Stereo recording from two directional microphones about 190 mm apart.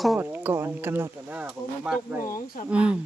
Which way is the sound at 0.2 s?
10° right (ahead or behind).